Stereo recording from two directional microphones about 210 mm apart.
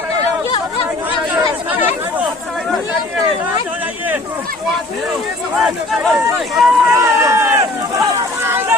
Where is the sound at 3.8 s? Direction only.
10° right (ahead or behind).